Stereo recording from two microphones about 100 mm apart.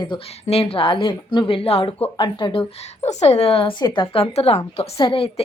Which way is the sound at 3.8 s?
55° left (ahead or behind).